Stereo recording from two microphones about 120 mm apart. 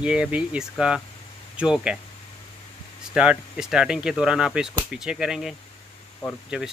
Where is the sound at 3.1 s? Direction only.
10° right (ahead or behind).